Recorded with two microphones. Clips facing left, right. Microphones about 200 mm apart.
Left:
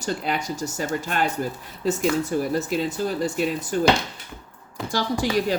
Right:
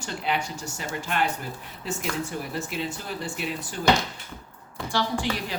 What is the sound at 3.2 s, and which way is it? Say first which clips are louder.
Speech: left 8 dB; 45° left (ahead or behind).